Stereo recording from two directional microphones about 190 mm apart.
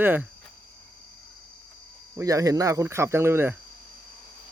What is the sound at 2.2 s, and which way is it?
Speech, 15° right (ahead or behind).